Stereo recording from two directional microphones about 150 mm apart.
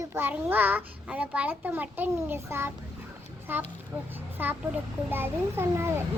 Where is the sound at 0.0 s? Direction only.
15° right (ahead or behind).